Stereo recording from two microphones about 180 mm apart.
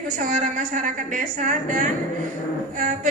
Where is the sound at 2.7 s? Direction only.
45° right (ahead or behind).